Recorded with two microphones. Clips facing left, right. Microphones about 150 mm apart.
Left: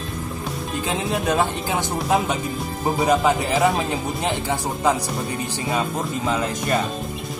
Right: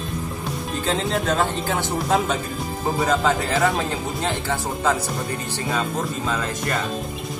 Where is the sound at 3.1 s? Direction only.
20° left (ahead or behind).